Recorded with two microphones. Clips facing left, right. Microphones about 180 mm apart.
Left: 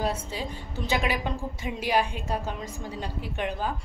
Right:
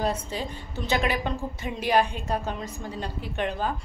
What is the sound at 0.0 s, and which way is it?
A woman's voice, 10° left (ahead or behind).